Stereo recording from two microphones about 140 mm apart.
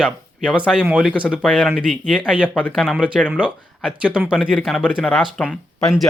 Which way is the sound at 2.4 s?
10° left (ahead or behind).